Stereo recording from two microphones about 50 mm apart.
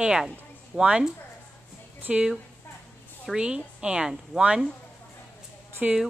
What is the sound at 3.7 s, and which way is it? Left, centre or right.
Speech, centre.